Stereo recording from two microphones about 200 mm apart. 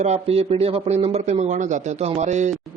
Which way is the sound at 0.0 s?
30° right (ahead or behind).